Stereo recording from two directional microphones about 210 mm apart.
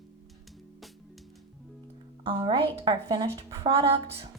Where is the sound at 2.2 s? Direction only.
25° right (ahead or behind).